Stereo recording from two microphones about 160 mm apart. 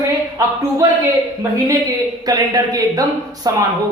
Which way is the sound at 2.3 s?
25° right (ahead or behind).